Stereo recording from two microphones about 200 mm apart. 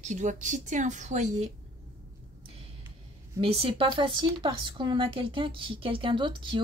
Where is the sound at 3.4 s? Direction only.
30° right (ahead or behind).